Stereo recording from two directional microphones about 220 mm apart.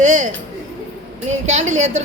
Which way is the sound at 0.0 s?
35° right (ahead or behind).